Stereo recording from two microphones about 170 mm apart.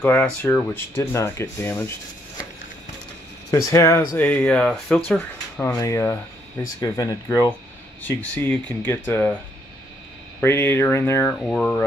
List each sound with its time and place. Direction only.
0.0 s speech: 10° left (ahead or behind)
3.5 s speech: 15° left (ahead or behind)
4.2 s speech: 10° left (ahead or behind)
8.0 s speech: 10° left (ahead or behind)
10.4 s speech: 15° left (ahead or behind)